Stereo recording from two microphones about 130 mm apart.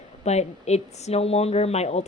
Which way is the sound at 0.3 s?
55° left (ahead or behind).